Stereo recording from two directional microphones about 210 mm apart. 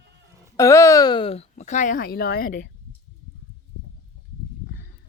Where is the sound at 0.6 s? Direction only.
15° left (ahead or behind); by 2.7 s 45° left (ahead or behind).